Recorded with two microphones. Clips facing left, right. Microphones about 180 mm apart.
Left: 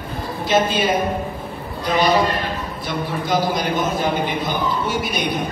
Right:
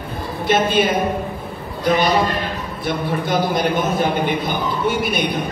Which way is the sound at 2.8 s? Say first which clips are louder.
Right 2 dB; 55° right (ahead or behind).